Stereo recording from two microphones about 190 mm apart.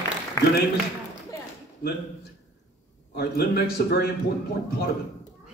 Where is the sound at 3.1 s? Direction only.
55° left (ahead or behind).